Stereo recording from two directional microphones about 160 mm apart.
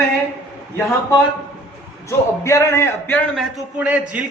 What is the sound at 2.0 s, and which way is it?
A man's voice, 15° left (ahead or behind).